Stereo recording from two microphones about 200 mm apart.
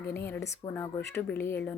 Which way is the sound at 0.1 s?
10° left (ahead or behind).